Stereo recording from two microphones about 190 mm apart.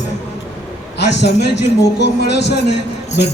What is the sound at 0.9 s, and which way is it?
A man's voice, 65° left (ahead or behind).